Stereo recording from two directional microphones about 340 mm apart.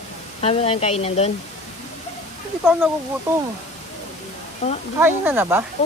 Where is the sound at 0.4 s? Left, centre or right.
Centre.